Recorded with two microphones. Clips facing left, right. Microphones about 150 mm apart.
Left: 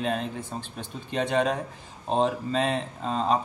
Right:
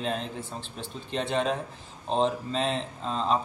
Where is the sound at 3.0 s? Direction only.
45° left (ahead or behind).